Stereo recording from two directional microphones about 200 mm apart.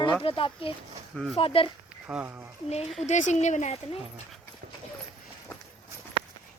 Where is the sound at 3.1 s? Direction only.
35° left (ahead or behind).